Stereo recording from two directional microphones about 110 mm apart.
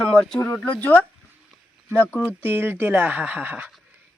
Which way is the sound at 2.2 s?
20° right (ahead or behind).